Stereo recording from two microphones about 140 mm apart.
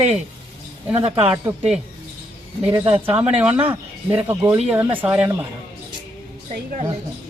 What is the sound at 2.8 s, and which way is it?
Speech, 40° right (ahead or behind).